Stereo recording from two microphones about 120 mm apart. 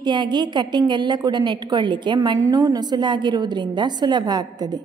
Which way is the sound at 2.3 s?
30° right (ahead or behind).